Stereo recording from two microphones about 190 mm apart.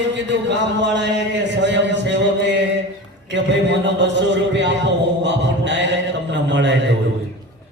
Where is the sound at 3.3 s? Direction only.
70° right (ahead or behind).